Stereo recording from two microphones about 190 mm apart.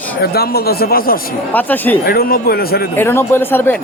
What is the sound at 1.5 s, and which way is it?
Speech, 10° left (ahead or behind).